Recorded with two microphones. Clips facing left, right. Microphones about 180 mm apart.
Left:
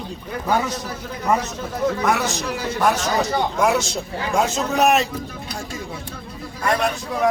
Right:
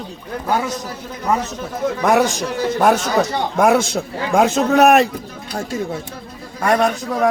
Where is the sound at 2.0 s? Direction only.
50° right (ahead or behind).